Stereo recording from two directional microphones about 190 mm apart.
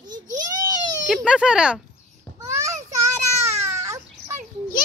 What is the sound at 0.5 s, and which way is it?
Baby cry, 20° right (ahead or behind).